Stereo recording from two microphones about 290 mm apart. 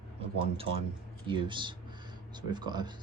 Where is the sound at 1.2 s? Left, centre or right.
Centre.